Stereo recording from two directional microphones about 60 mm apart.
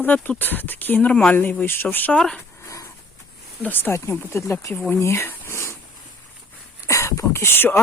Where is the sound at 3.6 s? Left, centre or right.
Left.